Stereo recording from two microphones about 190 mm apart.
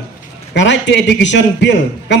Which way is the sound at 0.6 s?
70° left (ahead or behind).